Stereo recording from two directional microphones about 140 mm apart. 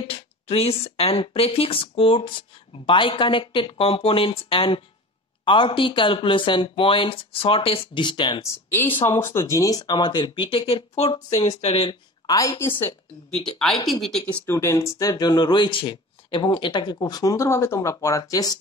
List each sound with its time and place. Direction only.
0.0 s speech: 45° left (ahead or behind)
9.2 s speech: 20° left (ahead or behind); by 12.0 s 40° left (ahead or behind)
12.3 s speech: 25° left (ahead or behind)
13.5 s speech: 5° left (ahead or behind)
14.4 s speech: 20° left (ahead or behind)